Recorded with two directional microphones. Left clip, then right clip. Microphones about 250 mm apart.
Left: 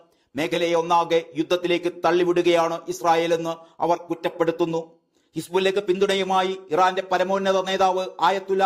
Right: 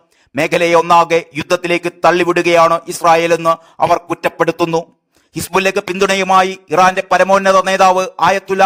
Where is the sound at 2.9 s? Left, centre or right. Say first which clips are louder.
Right 10 dB; right.